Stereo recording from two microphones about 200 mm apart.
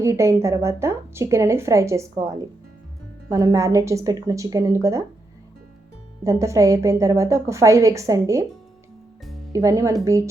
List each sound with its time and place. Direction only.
0.0 s a woman's voice: 15° right (ahead or behind)
6.2 s a woman's voice: 15° right (ahead or behind)
9.5 s a woman's voice: 15° right (ahead or behind)